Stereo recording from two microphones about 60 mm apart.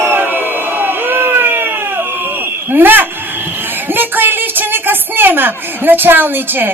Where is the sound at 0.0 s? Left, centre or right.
Right.